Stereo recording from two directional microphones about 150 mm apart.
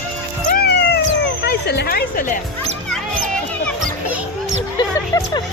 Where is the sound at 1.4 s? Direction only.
90° left; by 2.4 s 65° left (ahead or behind).